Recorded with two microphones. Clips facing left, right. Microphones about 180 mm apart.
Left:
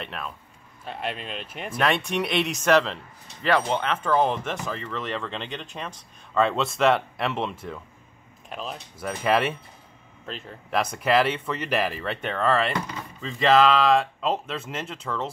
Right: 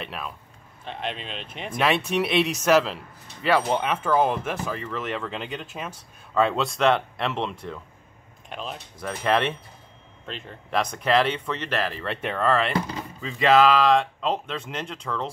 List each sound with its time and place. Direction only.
0.0 s speech: 5° right (ahead or behind)
12.0 s speech: centre (ahead or behind)
12.7 s speech: 30° right (ahead or behind)
13.2 s speech: centre (ahead or behind)